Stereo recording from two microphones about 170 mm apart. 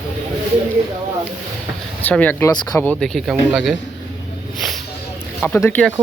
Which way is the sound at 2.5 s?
20° left (ahead or behind).